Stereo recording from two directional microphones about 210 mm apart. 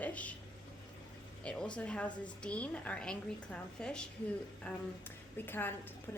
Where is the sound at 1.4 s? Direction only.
5° left (ahead or behind).